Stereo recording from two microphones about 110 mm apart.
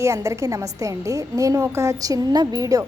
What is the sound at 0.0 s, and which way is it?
Speech, 25° right (ahead or behind).